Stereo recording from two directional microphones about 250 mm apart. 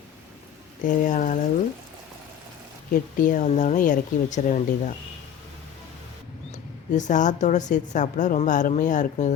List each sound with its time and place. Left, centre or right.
0.9 s speech: left
2.9 s speech: left
6.9 s a woman's voice: left